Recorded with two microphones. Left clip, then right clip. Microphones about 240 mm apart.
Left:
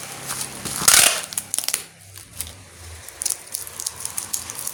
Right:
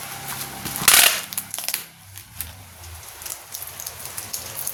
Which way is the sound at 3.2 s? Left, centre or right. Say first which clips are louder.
Left 8 dB; centre.